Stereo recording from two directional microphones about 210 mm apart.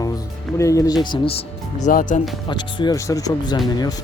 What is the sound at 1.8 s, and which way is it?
Speech, 40° left (ahead or behind).